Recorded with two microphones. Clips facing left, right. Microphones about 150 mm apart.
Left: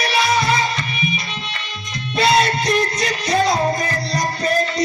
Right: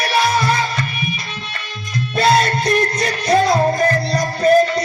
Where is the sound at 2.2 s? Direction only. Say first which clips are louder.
Right 1 dB; 50° right (ahead or behind).